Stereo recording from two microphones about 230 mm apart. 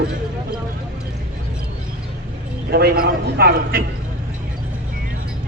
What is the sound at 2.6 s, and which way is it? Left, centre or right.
A man's voice, right.